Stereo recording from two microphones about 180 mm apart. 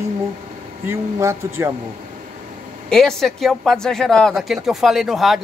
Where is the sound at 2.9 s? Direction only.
Centre (ahead or behind).